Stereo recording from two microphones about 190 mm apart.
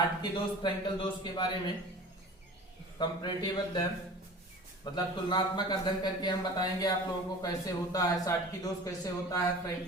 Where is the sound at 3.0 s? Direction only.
25° left (ahead or behind).